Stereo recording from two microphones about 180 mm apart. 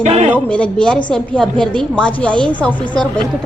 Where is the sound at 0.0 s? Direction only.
35° right (ahead or behind).